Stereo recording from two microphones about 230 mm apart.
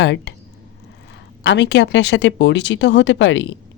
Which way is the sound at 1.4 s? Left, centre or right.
Left.